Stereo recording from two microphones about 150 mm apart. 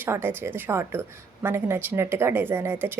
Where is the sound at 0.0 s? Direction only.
15° right (ahead or behind).